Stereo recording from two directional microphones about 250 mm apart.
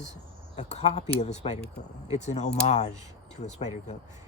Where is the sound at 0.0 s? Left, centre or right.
Left.